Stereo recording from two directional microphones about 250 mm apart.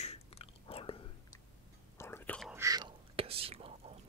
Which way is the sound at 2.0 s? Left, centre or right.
Centre.